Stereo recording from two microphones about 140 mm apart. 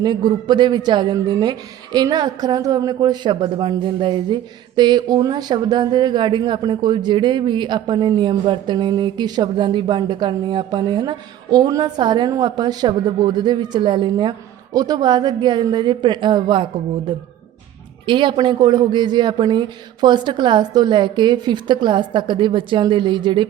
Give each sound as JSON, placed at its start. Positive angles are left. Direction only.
{"t": 0.0, "sound": "speech", "side_deg": -30}
{"t": 18.0, "sound": "speech", "side_deg": -35}